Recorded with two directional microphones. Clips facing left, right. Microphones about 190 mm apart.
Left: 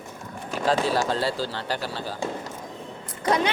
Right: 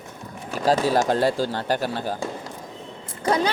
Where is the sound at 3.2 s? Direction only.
30° right (ahead or behind).